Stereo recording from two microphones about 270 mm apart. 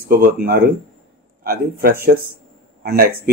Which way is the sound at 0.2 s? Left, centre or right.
Right.